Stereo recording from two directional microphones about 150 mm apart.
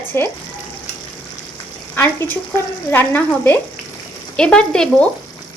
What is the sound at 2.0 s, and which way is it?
Speech, 15° left (ahead or behind).